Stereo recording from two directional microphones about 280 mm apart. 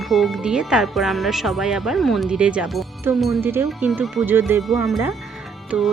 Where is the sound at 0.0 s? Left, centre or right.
Centre.